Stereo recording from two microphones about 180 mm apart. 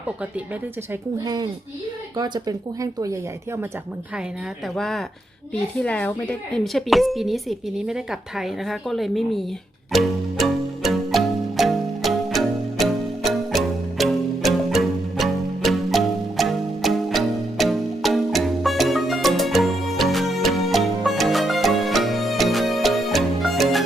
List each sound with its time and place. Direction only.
1.2 s speech: 25° right (ahead or behind)
4.8 s a woman's voice: centre (ahead or behind)
9.9 s music: centre (ahead or behind)